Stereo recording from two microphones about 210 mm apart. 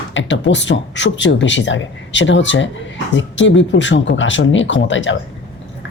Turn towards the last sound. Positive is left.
turn(degrees=60)  # may be behind; listen again after turning